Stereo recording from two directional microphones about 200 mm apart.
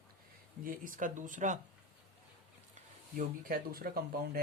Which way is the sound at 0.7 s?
45° right (ahead or behind).